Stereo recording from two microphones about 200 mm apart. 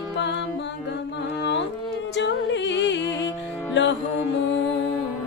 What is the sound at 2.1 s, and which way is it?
Music, 60° left (ahead or behind).